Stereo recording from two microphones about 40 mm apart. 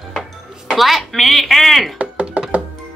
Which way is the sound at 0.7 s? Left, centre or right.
Centre.